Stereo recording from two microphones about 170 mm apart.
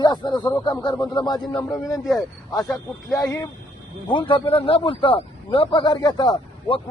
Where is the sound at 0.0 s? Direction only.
25° left (ahead or behind).